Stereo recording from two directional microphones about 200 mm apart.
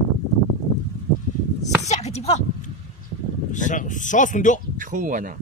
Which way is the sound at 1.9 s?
35° left (ahead or behind).